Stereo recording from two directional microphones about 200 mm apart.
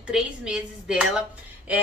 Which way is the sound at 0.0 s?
5° right (ahead or behind).